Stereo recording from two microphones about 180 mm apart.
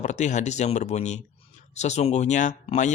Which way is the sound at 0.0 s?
40° left (ahead or behind).